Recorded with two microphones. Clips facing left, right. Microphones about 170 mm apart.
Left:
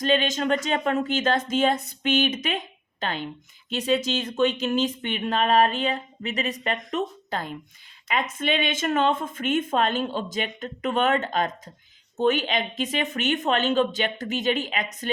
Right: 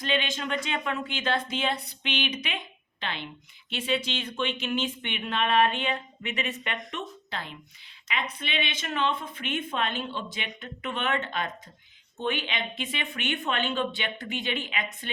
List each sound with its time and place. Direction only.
0.0 s speech: 40° left (ahead or behind)